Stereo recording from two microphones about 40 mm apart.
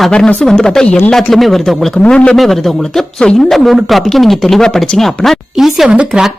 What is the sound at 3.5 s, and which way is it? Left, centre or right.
Speech, centre.